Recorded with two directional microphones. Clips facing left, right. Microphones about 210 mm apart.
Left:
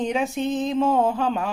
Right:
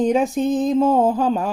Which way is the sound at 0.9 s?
35° right (ahead or behind).